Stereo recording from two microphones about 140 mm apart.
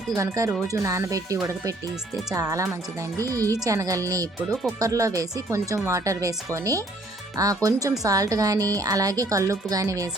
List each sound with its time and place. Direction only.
0.2 s speech: 25° right (ahead or behind)